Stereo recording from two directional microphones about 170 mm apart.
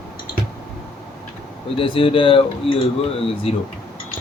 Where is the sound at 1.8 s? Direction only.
30° left (ahead or behind).